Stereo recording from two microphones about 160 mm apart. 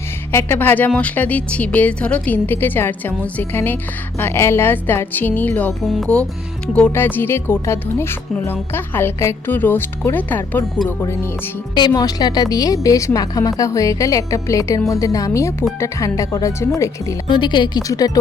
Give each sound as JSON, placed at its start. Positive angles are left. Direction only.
{"t": 0.3, "sound": "speech", "side_deg": 15}
{"t": 5.8, "sound": "a woman's voice", "side_deg": 0}